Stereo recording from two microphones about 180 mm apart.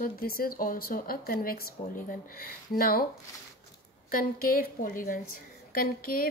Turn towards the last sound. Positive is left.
turn(degrees=55)  # may be behind; listen again after turning